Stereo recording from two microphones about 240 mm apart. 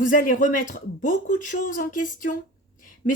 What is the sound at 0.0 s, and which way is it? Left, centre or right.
A woman's voice, left.